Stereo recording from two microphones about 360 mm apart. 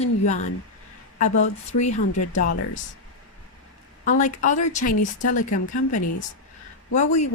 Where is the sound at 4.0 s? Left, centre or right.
Left.